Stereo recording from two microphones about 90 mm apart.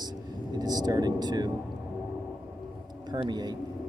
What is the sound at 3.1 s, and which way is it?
Speech, 55° right (ahead or behind).